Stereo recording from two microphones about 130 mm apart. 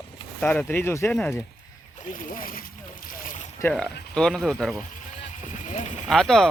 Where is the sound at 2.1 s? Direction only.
90° left.